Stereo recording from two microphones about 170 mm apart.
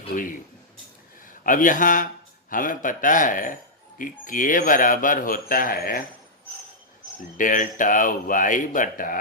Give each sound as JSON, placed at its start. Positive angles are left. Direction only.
{"t": 1.5, "sound": "speech", "side_deg": 50}
{"t": 7.3, "sound": "speech", "side_deg": 50}